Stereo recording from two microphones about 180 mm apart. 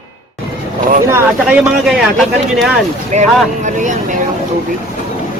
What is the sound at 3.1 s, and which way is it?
Speech, 40° right (ahead or behind).